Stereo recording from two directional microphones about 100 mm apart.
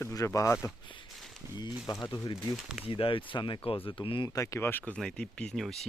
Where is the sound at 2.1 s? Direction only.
45° left (ahead or behind).